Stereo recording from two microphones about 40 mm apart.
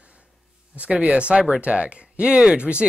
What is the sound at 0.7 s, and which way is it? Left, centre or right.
Speech, right.